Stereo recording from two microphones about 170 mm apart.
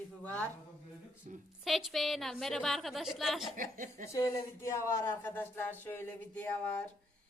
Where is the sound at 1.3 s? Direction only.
45° right (ahead or behind).